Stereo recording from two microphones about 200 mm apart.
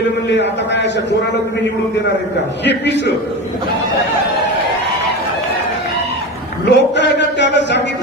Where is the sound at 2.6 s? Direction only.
60° left (ahead or behind).